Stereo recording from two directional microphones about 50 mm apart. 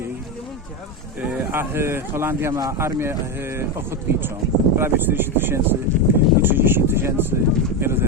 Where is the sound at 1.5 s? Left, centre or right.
Right.